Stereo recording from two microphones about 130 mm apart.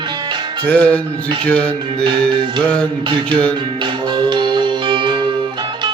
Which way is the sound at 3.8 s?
35° right (ahead or behind).